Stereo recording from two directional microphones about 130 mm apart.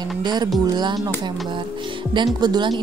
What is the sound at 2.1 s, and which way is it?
Speech, 35° right (ahead or behind).